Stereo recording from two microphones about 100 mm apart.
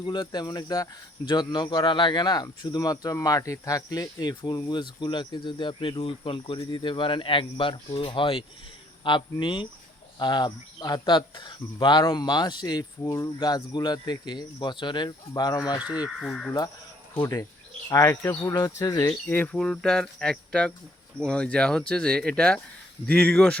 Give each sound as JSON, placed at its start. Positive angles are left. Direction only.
{"t": 0.0, "sound": "speech", "side_deg": 45}
{"t": 6.0, "sound": "speech", "side_deg": 65}
{"t": 13.0, "sound": "speech", "side_deg": 30}
{"t": 16.0, "sound": "speech", "side_deg": 0}
{"t": 17.2, "sound": "speech", "side_deg": 30}
{"t": 18.5, "sound": "speech", "side_deg": 40}
{"t": 19.3, "sound": "speech", "side_deg": 15}
{"t": 19.5, "sound": "speech", "side_deg": 5}